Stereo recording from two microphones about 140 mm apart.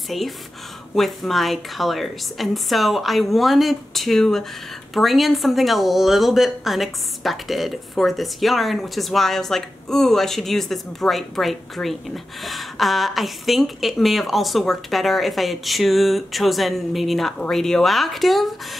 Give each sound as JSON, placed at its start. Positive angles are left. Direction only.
{"t": 0.1, "sound": "speech", "side_deg": 0}